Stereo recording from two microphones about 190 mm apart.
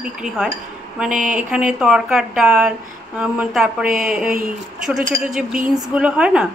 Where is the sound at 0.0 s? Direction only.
5° right (ahead or behind).